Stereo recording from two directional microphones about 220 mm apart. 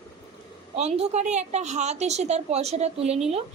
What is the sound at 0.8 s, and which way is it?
A woman's voice, 30° right (ahead or behind).